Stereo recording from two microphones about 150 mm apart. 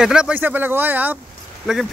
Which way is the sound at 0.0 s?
5° right (ahead or behind).